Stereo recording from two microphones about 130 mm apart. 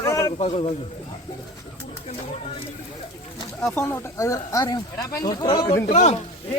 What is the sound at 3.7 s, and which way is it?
Speech, 20° left (ahead or behind).